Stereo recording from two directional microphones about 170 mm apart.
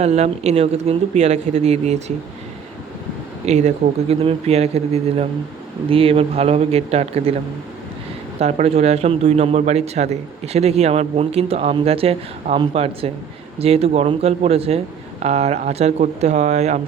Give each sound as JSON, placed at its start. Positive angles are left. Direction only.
{"t": 0.0, "sound": "a man's voice", "side_deg": -40}
{"t": 3.4, "sound": "a man's voice", "side_deg": -40}
{"t": 8.4, "sound": "a man's voice", "side_deg": -40}